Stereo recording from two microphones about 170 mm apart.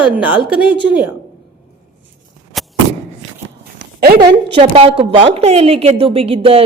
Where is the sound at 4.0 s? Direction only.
65° right (ahead or behind).